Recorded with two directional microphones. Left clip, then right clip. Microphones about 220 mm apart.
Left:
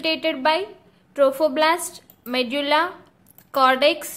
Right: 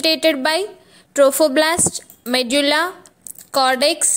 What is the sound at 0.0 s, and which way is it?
A woman's voice, 30° right (ahead or behind).